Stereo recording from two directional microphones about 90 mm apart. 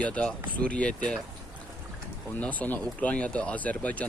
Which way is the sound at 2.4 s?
15° left (ahead or behind).